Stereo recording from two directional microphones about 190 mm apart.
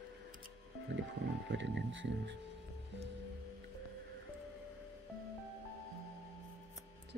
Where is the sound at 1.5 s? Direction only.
70° right (ahead or behind).